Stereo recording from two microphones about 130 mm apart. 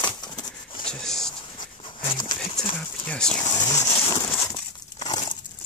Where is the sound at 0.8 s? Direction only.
5° left (ahead or behind).